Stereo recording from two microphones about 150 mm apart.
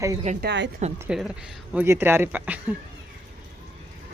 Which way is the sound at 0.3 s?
50° right (ahead or behind).